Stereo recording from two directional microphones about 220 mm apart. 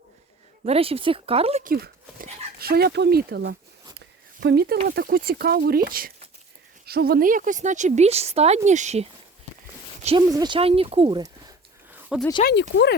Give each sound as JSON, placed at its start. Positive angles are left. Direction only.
{"t": 0.6, "sound": "speech", "side_deg": -25}
{"t": 1.7, "sound": "speech", "side_deg": -40}
{"t": 3.9, "sound": "a sound", "side_deg": -45}
{"t": 4.9, "sound": "a woman's voice", "side_deg": -40}
{"t": 10.2, "sound": "speech", "side_deg": -20}
{"t": 12.4, "sound": "speech", "side_deg": 50}